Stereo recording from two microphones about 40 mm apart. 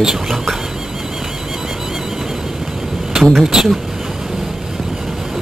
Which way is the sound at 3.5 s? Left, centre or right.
Centre.